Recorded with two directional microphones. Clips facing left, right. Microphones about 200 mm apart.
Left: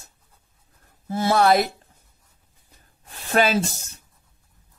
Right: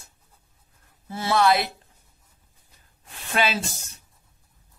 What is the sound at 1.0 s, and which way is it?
Speech, 45° left (ahead or behind).